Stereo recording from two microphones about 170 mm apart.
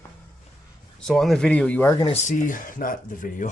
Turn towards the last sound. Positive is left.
turn(degrees=50)  # may be behind; listen again after turning